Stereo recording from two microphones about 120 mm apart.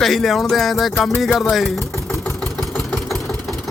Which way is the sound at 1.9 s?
25° left (ahead or behind).